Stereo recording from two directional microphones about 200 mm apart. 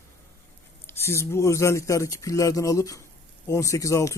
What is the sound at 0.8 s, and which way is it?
A man's voice, 10° left (ahead or behind).